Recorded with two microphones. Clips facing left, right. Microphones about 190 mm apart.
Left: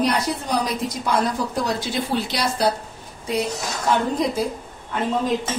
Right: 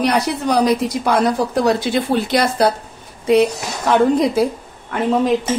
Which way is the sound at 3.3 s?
70° right (ahead or behind).